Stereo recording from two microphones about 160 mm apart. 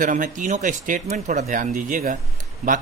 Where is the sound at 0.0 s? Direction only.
55° right (ahead or behind).